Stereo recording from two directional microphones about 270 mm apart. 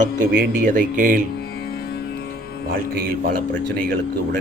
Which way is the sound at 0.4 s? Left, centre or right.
Right.